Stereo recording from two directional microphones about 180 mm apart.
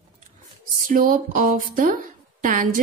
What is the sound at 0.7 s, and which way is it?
Speech, 50° right (ahead or behind).